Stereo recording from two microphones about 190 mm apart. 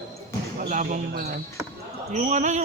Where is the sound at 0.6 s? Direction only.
45° right (ahead or behind).